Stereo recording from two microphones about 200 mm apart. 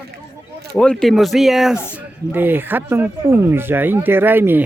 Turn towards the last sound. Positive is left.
turn(degrees=-10)  # may be behind; listen again after turning